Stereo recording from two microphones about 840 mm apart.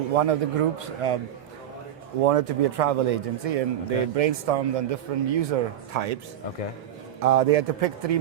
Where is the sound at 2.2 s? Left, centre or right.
Right.